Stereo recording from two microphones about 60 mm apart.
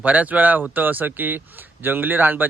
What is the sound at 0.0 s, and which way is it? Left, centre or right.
Speech, right.